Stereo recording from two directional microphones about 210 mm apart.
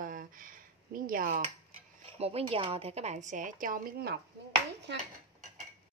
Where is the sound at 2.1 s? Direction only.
30° right (ahead or behind); by 4.2 s 45° right (ahead or behind).